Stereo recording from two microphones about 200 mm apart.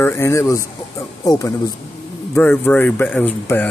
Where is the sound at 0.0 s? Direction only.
10° left (ahead or behind).